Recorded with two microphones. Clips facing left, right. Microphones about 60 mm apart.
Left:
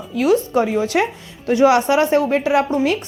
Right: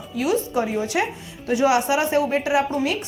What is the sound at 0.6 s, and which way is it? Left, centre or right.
Speech, left.